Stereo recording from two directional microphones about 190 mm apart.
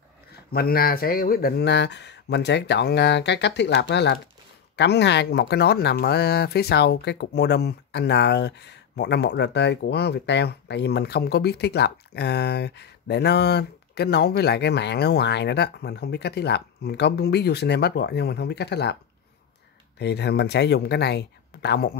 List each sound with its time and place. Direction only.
0.5 s speech: 50° left (ahead or behind)
20.0 s speech: 60° left (ahead or behind)